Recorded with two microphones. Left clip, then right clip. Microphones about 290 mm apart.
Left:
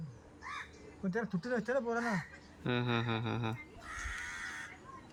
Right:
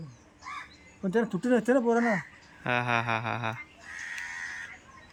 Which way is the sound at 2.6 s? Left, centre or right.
Centre.